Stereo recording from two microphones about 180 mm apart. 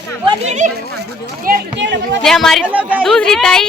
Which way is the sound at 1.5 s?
65° right (ahead or behind).